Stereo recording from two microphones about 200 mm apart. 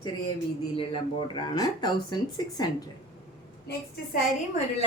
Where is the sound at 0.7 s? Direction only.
25° left (ahead or behind).